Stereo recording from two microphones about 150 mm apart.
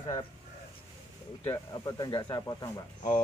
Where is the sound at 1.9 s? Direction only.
30° left (ahead or behind).